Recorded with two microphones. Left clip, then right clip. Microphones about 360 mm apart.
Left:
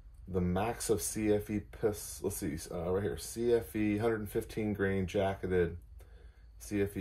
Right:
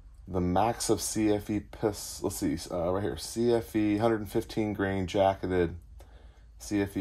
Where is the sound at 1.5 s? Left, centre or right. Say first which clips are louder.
Right 3 dB; centre.